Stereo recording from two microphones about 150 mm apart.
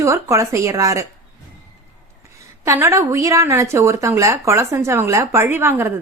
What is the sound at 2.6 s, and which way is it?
A woman's voice, 15° right (ahead or behind).